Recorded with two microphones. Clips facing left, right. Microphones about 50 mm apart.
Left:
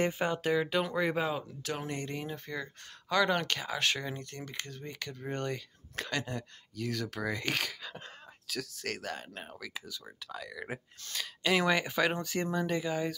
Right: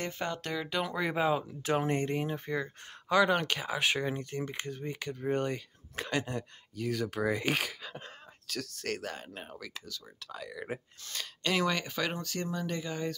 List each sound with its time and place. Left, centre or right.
0.0 s speech: centre
1.6 s speech: right; by 9.7 s centre
9.8 s speech: centre
10.3 s speech: centre
11.6 s speech: centre